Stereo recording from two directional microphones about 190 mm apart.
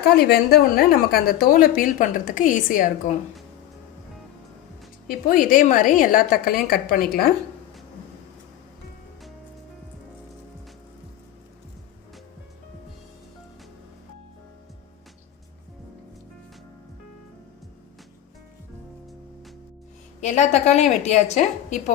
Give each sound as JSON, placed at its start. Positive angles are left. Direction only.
{"t": 0.2, "sound": "a woman's voice", "side_deg": 55}
{"t": 5.0, "sound": "a woman's voice", "side_deg": 45}
{"t": 20.2, "sound": "a woman's voice", "side_deg": 40}